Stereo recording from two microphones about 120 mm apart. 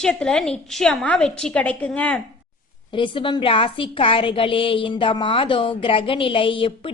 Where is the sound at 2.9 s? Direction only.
45° left (ahead or behind).